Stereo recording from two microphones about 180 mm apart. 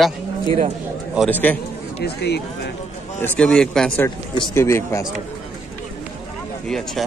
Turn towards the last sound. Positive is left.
turn(degrees=0)  # may be behind; listen again after turning